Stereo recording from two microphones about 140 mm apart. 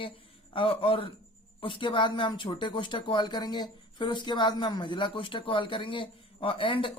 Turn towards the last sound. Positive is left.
turn(degrees=40)  # may be behind; listen again after turning